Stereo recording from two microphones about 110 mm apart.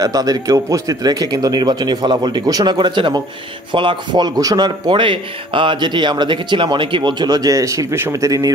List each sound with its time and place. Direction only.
0.0 s speech: 35° right (ahead or behind)